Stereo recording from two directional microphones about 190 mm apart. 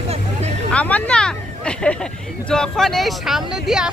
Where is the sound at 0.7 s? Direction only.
5° left (ahead or behind).